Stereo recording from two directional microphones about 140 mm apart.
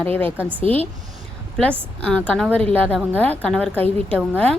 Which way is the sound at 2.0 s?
10° left (ahead or behind).